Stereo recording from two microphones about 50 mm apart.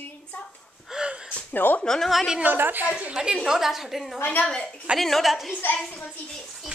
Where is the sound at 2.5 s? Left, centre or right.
Right.